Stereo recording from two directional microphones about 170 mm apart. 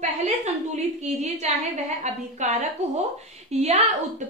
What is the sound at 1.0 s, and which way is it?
A woman's voice, 45° right (ahead or behind).